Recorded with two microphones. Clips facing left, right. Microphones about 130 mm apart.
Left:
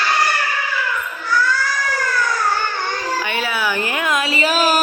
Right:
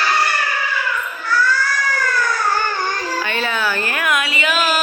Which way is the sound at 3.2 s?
10° left (ahead or behind).